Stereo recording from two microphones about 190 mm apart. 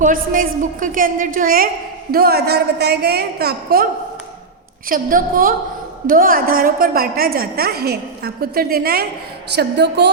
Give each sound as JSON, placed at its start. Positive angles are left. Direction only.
{"t": 0.0, "sound": "a woman's voice", "side_deg": -45}
{"t": 4.9, "sound": "a woman's voice", "side_deg": -45}